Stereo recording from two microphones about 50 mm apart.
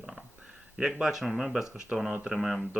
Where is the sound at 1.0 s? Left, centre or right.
Centre.